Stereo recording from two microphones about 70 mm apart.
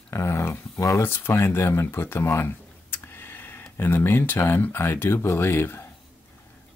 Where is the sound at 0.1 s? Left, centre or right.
Left.